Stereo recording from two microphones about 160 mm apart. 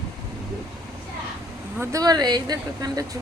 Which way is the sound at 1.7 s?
20° right (ahead or behind).